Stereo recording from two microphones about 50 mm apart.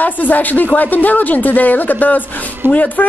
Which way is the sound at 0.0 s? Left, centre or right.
Left.